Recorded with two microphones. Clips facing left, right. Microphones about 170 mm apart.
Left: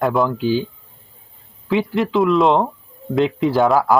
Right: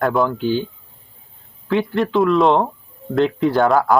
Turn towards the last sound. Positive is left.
turn(degrees=0)  # may be behind; listen again after turning